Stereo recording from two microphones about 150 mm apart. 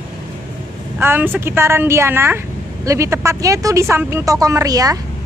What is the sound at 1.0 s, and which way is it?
Speech, 15° right (ahead or behind).